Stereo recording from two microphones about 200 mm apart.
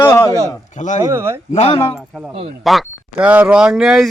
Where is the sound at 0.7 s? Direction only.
35° left (ahead or behind).